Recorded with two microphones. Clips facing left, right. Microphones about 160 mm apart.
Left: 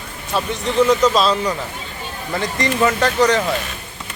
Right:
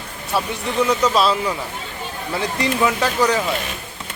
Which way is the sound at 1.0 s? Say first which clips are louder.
Left 2 dB; 10° right (ahead or behind).